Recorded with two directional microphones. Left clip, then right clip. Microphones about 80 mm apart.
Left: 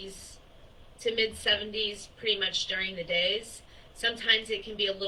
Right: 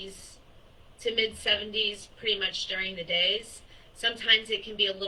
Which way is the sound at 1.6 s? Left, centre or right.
Right.